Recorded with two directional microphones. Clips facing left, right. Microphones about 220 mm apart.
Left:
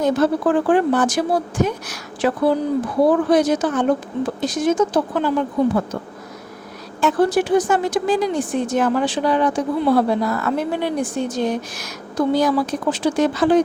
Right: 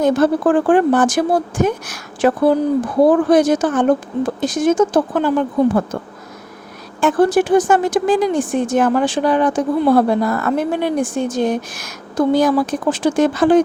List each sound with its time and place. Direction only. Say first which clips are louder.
0.0 s a woman's voice: right 3 dB; 50° right (ahead or behind)
7.0 s a woman's voice: right 3 dB; 50° right (ahead or behind)